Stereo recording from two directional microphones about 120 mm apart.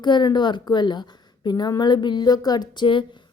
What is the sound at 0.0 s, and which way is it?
A woman's voice, 40° left (ahead or behind).